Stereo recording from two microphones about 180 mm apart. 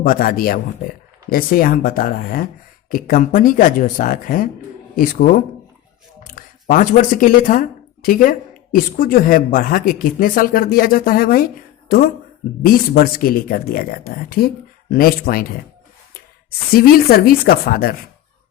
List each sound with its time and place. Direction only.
0.0 s speech: 55° left (ahead or behind)
16.5 s speech: 55° left (ahead or behind)